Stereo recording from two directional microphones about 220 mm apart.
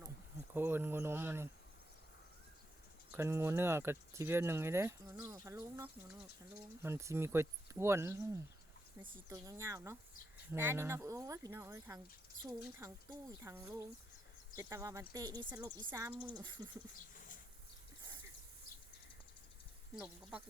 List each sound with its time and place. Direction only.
0.5 s speech: 10° right (ahead or behind)
3.1 s speech: 10° right (ahead or behind)